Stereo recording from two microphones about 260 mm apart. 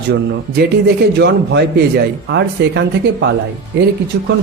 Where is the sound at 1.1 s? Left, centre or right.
Right.